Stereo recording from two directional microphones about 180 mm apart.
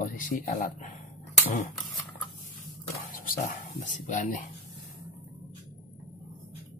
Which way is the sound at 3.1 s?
50° left (ahead or behind).